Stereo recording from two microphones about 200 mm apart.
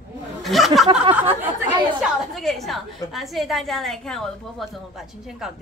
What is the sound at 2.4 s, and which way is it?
A woman's voice, centre (ahead or behind).